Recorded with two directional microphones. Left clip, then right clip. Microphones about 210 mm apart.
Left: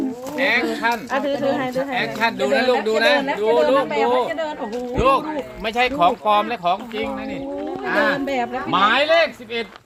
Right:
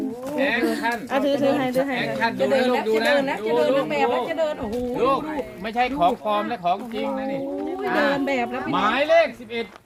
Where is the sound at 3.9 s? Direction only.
55° right (ahead or behind).